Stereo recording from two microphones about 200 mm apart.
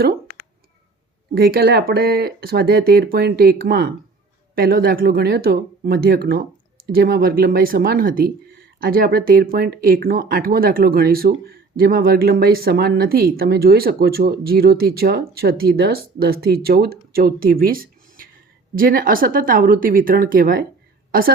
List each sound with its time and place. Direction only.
1.4 s a woman's voice: 50° right (ahead or behind)